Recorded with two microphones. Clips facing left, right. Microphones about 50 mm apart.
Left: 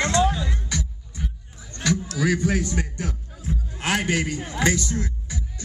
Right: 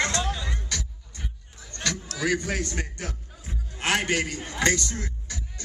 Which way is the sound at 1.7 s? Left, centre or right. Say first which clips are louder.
Left 3 dB; centre.